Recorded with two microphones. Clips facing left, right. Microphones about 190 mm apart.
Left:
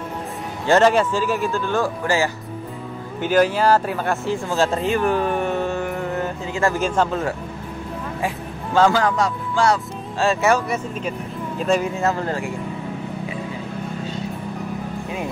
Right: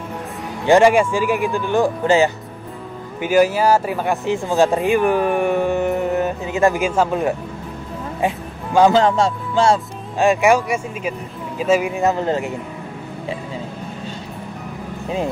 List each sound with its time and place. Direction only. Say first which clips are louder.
0.7 s speech: right 3 dB; 10° right (ahead or behind)
3.2 s speech: right 2 dB; 10° right (ahead or behind)
8.7 s speech: right 4 dB; 20° right (ahead or behind)